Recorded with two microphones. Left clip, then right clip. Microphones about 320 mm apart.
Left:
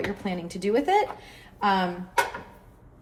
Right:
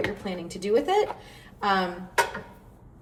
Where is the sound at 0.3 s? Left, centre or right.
Left.